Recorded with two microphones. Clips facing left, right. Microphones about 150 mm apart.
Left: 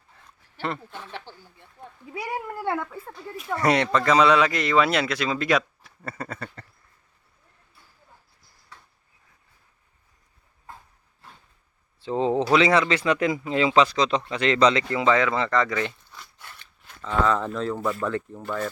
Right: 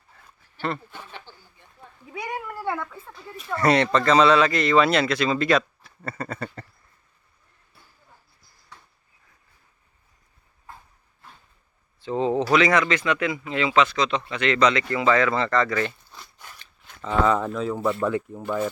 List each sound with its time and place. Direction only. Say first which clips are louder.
1.3 s a sound: left 4 dB; 75° left (ahead or behind)
2.6 s speech: left 2 dB; 20° left (ahead or behind)
11.9 s a man's voice: even; 30° left (ahead or behind)
14.8 s speech: right 1 dB; 20° left (ahead or behind)
17.0 s speech: right 2 dB; 10° right (ahead or behind)